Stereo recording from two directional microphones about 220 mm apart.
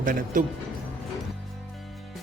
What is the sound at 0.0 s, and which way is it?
Speech, 40° right (ahead or behind).